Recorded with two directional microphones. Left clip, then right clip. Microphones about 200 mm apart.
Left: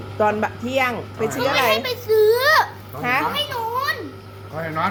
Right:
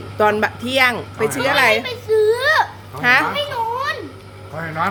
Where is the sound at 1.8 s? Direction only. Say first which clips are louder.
Even; 20° left (ahead or behind).